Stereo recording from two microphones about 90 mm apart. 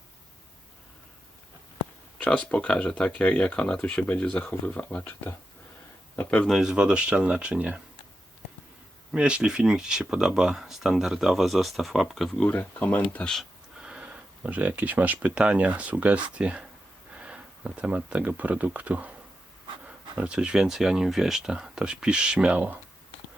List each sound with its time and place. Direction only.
2.1 s speech: 15° left (ahead or behind)
6.4 s speech: centre (ahead or behind)
9.1 s speech: 10° right (ahead or behind); by 13.4 s 10° left (ahead or behind)
13.7 s speech: 5° right (ahead or behind)